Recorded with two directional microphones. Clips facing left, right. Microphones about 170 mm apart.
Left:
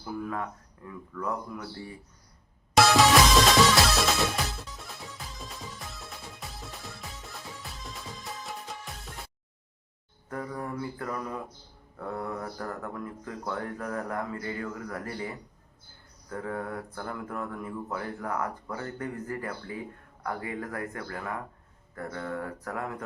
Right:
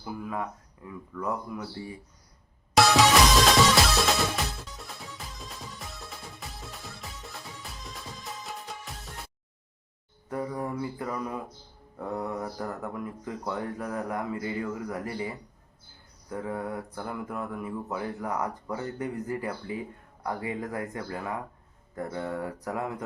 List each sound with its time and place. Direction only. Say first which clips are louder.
0.0 s speech: even; 10° right (ahead or behind)
2.7 s music: even; centre (ahead or behind)
10.2 s speech: right 3 dB; 15° right (ahead or behind)
16.3 s speech: right 1 dB; 15° right (ahead or behind)